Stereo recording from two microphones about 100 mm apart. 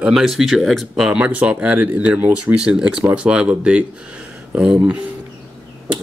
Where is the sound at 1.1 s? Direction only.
15° right (ahead or behind).